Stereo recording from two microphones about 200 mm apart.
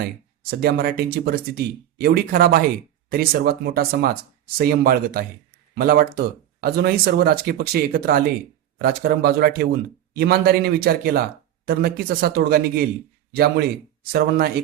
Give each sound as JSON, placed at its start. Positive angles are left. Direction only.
{"t": 0.6, "sound": "speech", "side_deg": -45}